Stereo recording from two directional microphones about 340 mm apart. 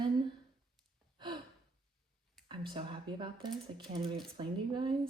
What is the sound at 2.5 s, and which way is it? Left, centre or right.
A woman's voice, centre.